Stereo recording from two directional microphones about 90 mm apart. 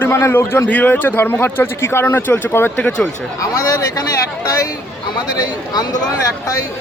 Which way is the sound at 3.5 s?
40° left (ahead or behind).